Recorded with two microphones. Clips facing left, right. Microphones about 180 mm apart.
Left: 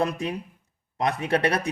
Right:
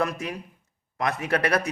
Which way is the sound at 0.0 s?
30° left (ahead or behind).